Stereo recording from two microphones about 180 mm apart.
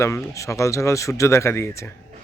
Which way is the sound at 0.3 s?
15° left (ahead or behind).